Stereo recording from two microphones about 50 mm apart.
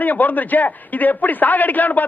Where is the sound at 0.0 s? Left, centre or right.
Left.